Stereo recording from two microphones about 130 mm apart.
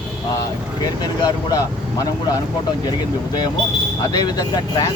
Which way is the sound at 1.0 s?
30° left (ahead or behind).